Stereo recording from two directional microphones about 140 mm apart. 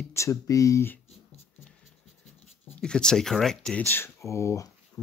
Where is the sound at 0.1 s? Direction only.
20° left (ahead or behind).